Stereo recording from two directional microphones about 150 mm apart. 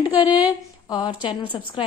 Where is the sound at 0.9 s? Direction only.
30° left (ahead or behind).